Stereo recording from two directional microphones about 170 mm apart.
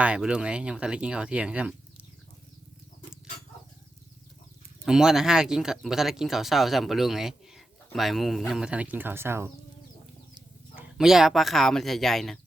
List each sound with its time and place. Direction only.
0.0 s speech: 5° right (ahead or behind)
4.9 s speech: 5° right (ahead or behind)
10.8 s speech: centre (ahead or behind)